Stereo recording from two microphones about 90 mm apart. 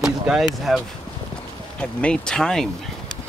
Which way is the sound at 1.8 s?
15° left (ahead or behind).